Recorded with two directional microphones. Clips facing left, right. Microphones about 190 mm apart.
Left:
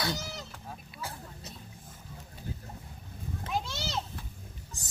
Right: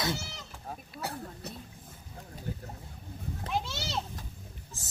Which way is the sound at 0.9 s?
60° right (ahead or behind).